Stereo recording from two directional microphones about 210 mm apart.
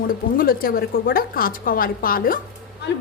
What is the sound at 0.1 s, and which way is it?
A woman's voice, 45° left (ahead or behind).